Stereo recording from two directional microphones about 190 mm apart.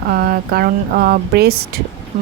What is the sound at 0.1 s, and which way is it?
Speech, 50° right (ahead or behind).